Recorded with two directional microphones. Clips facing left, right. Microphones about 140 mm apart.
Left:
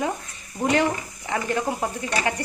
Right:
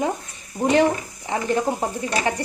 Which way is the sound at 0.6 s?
20° right (ahead or behind).